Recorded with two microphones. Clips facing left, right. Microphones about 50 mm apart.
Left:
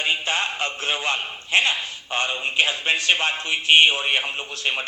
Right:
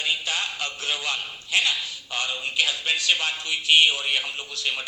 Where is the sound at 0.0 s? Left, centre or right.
Left.